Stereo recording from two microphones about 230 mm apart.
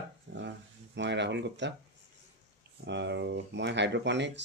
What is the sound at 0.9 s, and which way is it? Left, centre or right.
Speech, right.